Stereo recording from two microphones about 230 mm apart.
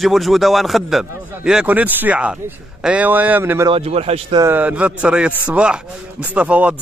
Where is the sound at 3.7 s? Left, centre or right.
Right.